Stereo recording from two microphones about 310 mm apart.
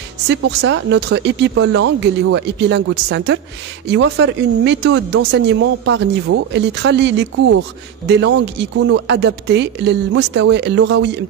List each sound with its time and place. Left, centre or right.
0.3 s speech: right
8.8 s speech: right